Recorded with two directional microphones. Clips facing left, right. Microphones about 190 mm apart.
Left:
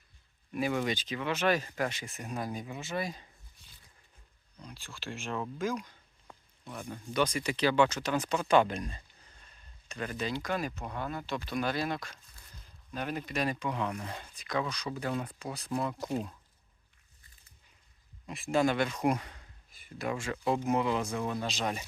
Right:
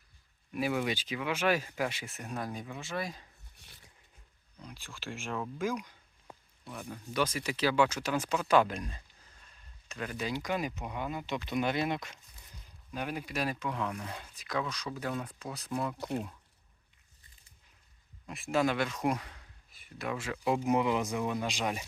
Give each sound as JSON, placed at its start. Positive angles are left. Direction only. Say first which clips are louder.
{"t": 0.5, "sound": "speech", "louder": "left 1 dB", "side_deg": -5}
{"t": 4.5, "sound": "speech", "louder": "even", "side_deg": -10}
{"t": 5.5, "sound": "a sound", "louder": "even", "side_deg": -15}
{"t": 6.7, "sound": "speech", "louder": "left 2 dB", "side_deg": 0}
{"t": 18.3, "sound": "speech", "louder": "left 2 dB", "side_deg": 0}